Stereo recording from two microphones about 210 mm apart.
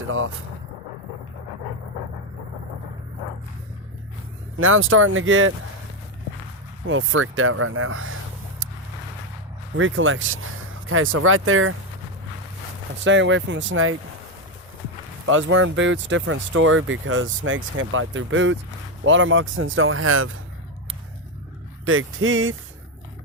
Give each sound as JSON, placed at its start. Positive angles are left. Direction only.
{"t": 0.1, "sound": "speech", "side_deg": -70}
{"t": 4.5, "sound": "speech", "side_deg": -75}
{"t": 6.8, "sound": "speech", "side_deg": -70}
{"t": 9.7, "sound": "speech", "side_deg": -70}
{"t": 13.1, "sound": "speech", "side_deg": -60}
{"t": 15.3, "sound": "speech", "side_deg": -70}
{"t": 21.8, "sound": "speech", "side_deg": -75}